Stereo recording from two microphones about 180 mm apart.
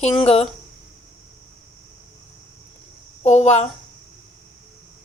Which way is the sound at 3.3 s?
35° left (ahead or behind).